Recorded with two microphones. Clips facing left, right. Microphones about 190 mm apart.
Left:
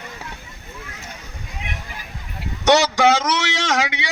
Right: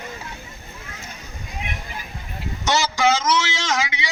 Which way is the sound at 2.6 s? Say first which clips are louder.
Left 5 dB; 65° left (ahead or behind).